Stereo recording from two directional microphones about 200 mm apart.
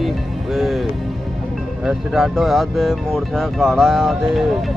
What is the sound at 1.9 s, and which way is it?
Speech, centre (ahead or behind).